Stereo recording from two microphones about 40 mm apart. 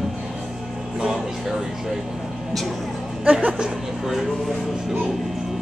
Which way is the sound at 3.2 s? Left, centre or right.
Right.